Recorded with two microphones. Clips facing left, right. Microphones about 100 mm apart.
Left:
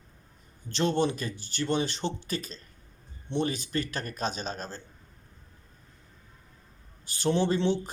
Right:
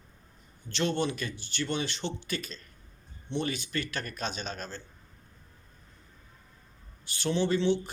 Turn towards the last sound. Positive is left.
turn(degrees=40)  # may be behind; listen again after turning